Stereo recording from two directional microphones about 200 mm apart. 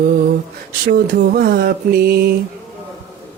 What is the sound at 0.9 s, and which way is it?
Mantra, 50° right (ahead or behind).